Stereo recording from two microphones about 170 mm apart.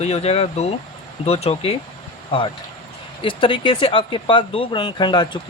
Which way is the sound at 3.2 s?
30° left (ahead or behind).